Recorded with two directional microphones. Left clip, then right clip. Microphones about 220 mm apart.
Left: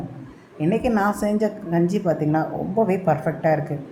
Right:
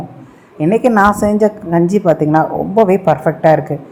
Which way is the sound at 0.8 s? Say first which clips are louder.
Right 12 dB; 20° right (ahead or behind).